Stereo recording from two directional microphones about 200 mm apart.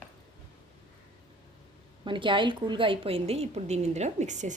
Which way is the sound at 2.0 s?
25° right (ahead or behind).